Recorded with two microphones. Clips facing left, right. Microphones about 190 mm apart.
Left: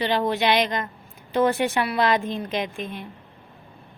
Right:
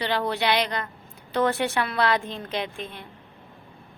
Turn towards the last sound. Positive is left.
turn(degrees=15)  # may be behind; listen again after turning